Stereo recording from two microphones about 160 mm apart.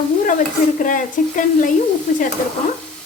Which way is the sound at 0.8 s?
55° left (ahead or behind).